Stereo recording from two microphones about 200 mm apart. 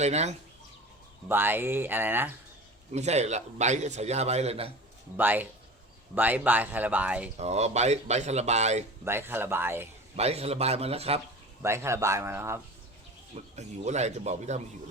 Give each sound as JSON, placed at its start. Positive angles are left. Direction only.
{"t": 0.0, "sound": "a man's voice", "side_deg": -35}
{"t": 1.3, "sound": "speech", "side_deg": -10}
{"t": 2.9, "sound": "a man's voice", "side_deg": -35}
{"t": 5.1, "sound": "speech", "side_deg": -10}
{"t": 7.3, "sound": "a man's voice", "side_deg": -35}
{"t": 9.0, "sound": "speech", "side_deg": -10}
{"t": 10.2, "sound": "a man's voice", "side_deg": -30}
{"t": 11.6, "sound": "speech", "side_deg": -15}
{"t": 13.3, "sound": "a man's voice", "side_deg": -35}